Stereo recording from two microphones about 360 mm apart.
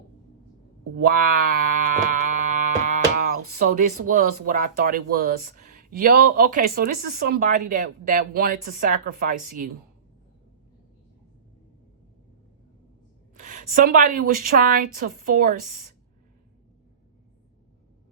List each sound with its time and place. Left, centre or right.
1.0 s a sound: right
4.0 s speech: right
13.3 s speech: right